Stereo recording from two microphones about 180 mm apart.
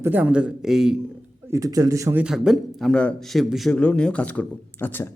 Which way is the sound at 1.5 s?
20° right (ahead or behind).